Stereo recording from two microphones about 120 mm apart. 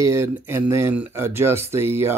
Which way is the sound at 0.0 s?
25° right (ahead or behind).